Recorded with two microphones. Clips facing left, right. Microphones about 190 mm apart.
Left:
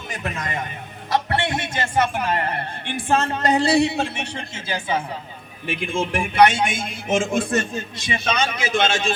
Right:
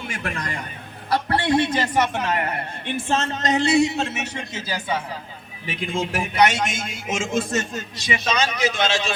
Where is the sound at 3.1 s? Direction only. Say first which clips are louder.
Left 4 dB; 55° left (ahead or behind).